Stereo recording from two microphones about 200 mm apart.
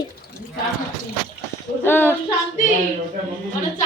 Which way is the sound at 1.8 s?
10° left (ahead or behind).